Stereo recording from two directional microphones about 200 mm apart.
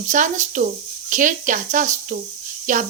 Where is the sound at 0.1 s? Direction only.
40° right (ahead or behind).